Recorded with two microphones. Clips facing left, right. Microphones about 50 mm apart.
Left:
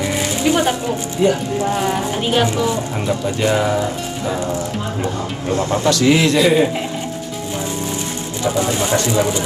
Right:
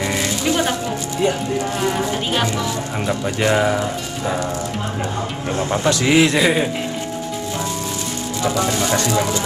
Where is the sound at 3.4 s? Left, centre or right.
Right.